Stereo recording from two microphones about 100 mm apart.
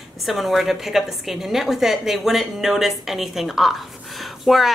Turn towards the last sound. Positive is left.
turn(degrees=0)  # may be behind; listen again after turning